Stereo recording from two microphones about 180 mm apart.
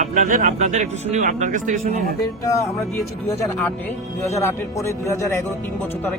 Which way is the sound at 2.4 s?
20° left (ahead or behind).